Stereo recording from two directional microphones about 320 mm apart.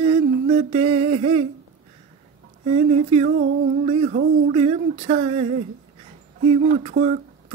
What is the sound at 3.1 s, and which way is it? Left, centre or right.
Speech, right.